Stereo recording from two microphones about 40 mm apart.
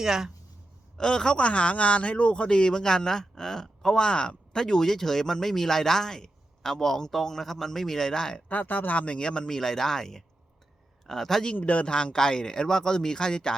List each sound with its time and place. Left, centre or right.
0.0 s speech: centre
0.9 s speech: centre
1.5 s speech: left; by 8.4 s centre
8.4 s speech: left
9.0 s speech: left
9.6 s speech: centre
11.5 s speech: left
11.9 s speech: left